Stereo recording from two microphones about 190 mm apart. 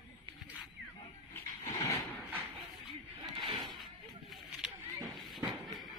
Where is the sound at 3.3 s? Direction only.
25° right (ahead or behind).